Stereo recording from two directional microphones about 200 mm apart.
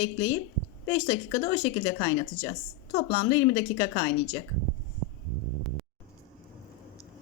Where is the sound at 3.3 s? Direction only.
20° left (ahead or behind).